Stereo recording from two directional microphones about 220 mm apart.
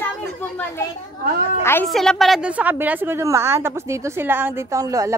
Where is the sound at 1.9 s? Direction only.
Centre (ahead or behind).